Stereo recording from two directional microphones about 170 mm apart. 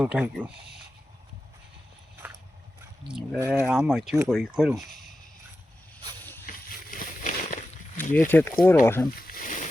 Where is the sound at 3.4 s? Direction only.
10° right (ahead or behind).